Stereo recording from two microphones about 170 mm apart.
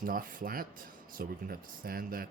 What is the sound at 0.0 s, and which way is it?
Speech, 55° right (ahead or behind).